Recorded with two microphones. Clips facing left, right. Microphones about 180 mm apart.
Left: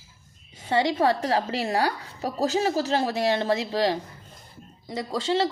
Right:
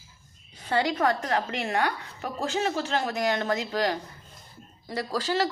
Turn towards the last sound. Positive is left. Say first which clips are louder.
# left 2 dB
turn(degrees=25)  # may be behind; listen again after turning